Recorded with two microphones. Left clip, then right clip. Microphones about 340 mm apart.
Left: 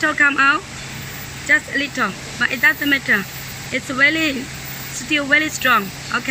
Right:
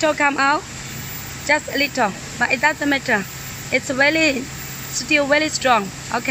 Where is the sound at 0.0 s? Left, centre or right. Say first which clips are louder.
Left 2 dB; centre.